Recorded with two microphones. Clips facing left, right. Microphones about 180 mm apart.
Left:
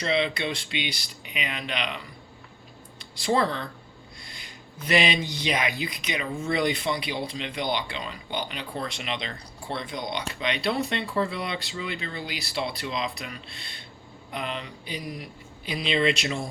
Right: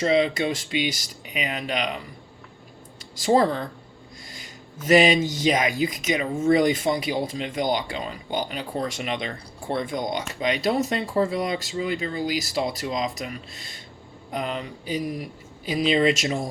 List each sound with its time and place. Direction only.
0.0 s speech: 40° right (ahead or behind)
3.0 s speech: 45° right (ahead or behind)